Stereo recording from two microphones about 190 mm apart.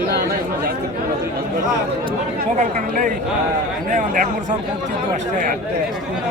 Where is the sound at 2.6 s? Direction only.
45° right (ahead or behind).